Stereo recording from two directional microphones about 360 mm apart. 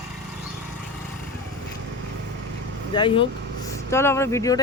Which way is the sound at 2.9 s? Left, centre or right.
Centre.